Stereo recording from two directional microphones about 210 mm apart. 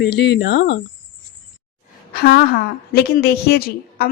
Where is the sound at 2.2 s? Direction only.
50° left (ahead or behind).